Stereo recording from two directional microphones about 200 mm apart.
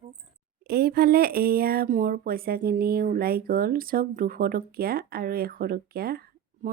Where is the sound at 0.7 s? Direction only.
50° right (ahead or behind).